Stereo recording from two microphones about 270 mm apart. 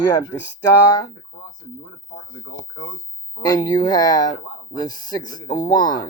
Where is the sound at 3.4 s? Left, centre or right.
Centre.